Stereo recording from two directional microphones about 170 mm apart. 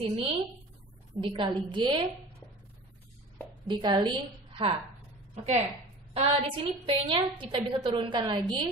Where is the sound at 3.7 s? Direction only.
25° right (ahead or behind).